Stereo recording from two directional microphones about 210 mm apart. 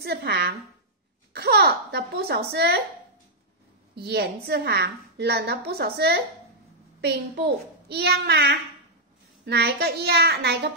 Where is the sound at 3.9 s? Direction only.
50° right (ahead or behind).